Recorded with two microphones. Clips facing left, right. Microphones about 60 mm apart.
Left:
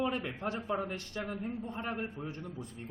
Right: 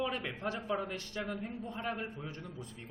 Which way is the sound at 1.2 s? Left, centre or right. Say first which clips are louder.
Even; left.